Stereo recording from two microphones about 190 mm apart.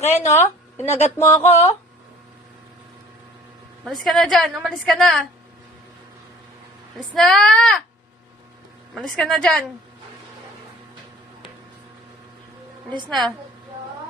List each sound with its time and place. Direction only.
0.0 s a woman's voice: 35° left (ahead or behind)
1.2 s speech: 15° left (ahead or behind)
1.5 s a woman's voice: 35° left (ahead or behind)
3.8 s a woman's voice: centre (ahead or behind)
7.1 s a woman's voice: centre (ahead or behind)
9.0 s a woman's voice: centre (ahead or behind)
12.9 s a woman's voice: 25° right (ahead or behind)